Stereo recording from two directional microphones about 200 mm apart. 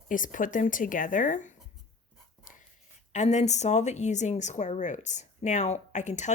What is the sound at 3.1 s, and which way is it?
Speech, 35° left (ahead or behind).